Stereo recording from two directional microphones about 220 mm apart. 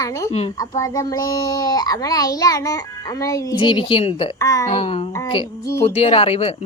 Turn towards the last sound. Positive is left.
turn(degrees=30)  # may be behind; listen again after turning